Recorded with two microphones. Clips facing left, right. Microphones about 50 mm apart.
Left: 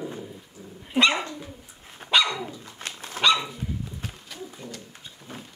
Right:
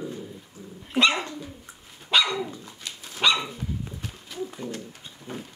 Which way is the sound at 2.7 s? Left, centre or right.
Left.